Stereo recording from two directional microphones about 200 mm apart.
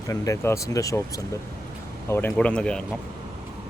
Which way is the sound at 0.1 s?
15° left (ahead or behind).